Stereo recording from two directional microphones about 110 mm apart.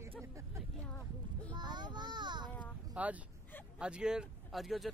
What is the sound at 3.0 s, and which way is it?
Speech, 10° right (ahead or behind).